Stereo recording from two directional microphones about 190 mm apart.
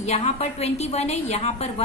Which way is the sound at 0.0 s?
35° left (ahead or behind).